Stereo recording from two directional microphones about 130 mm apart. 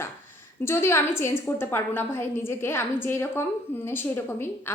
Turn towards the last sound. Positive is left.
turn(degrees=15)  # may be behind; listen again after turning